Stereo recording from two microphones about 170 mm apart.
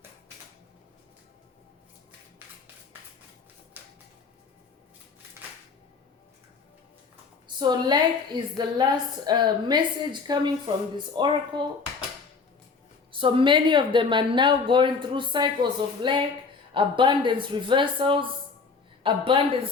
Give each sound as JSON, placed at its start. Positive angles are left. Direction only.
{"t": 3.8, "sound": "a sound", "side_deg": -10}
{"t": 7.4, "sound": "a woman's voice", "side_deg": -25}
{"t": 13.1, "sound": "a woman's voice", "side_deg": -30}